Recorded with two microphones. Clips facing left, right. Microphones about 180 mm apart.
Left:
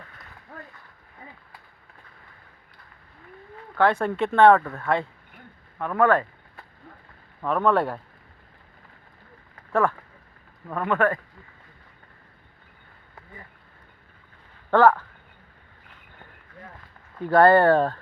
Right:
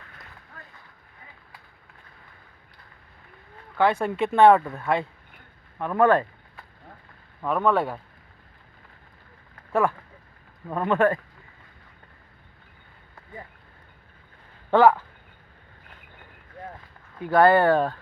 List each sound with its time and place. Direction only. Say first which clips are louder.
3.8 s speech: left 1 dB; 5° right (ahead or behind); by 6.2 s 20° right (ahead or behind)
7.4 s speech: left 1 dB; 5° right (ahead or behind)
10.7 s speech: right 2 dB; 20° right (ahead or behind)
14.7 s a sound: even; 15° right (ahead or behind)
17.2 s speech: left 1 dB; 5° right (ahead or behind)